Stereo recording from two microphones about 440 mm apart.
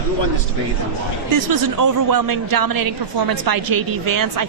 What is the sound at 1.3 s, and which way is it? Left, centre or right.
A woman's voice, right.